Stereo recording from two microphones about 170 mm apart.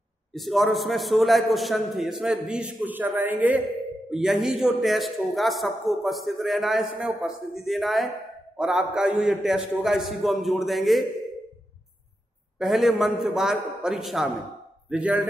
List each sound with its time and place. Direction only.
0.3 s a man's voice: centre (ahead or behind)
12.5 s a man's voice: centre (ahead or behind)